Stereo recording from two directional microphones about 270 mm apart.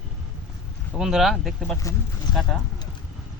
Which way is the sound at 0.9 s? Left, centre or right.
Centre.